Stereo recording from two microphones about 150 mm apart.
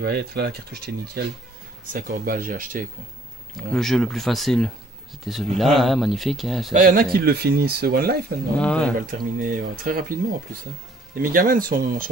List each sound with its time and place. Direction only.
0.0 s speech: 90° right
1.9 s speech: 70° right (ahead or behind)
3.7 s speech: 5° left (ahead or behind)
6.7 s speech: 65° right (ahead or behind); by 8.2 s 90° right
8.5 s speech: 5° left (ahead or behind)
9.0 s speech: 65° right (ahead or behind)
11.1 s speech: 70° right (ahead or behind)